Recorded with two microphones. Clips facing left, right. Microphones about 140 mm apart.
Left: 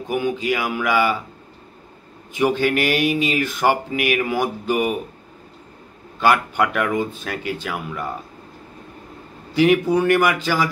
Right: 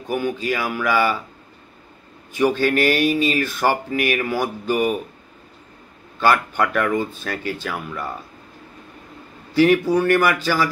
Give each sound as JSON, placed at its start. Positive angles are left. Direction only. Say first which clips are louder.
{"t": 0.1, "sound": "speech", "louder": "left 1 dB", "side_deg": 15}
{"t": 2.3, "sound": "speech", "louder": "right 1 dB", "side_deg": 15}
{"t": 6.1, "sound": "speech", "louder": "left 1 dB", "side_deg": 15}
{"t": 9.5, "sound": "speech", "louder": "even", "side_deg": 15}